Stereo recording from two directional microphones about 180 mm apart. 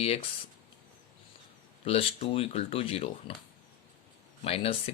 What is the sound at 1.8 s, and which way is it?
Speech, 30° left (ahead or behind).